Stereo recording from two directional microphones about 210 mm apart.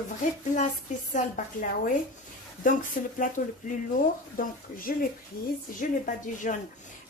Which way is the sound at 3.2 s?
40° left (ahead or behind).